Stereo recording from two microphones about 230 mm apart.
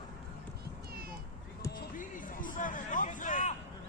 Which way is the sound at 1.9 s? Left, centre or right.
Left.